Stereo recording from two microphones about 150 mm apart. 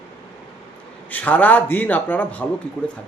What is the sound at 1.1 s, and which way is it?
A man's voice, 10° left (ahead or behind).